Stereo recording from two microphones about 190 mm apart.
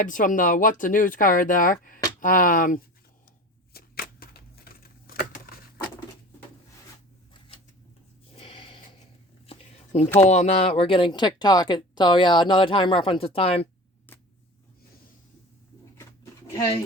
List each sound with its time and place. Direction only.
0.0 s speech: 45° left (ahead or behind)
3.7 s a sound: 55° left (ahead or behind)
7.3 s typewriter: 25° left (ahead or behind)
8.4 s snort: 30° left (ahead or behind)
9.5 s a sound: 35° left (ahead or behind)
10.2 s speech: 35° left (ahead or behind)
14.1 s vehicle: 10° left (ahead or behind)